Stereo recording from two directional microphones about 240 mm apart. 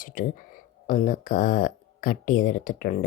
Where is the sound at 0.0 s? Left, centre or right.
Left.